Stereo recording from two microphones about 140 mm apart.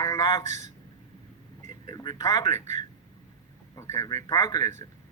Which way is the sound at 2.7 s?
60° right (ahead or behind).